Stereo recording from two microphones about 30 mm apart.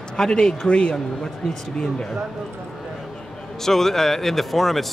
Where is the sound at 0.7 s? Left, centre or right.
Left.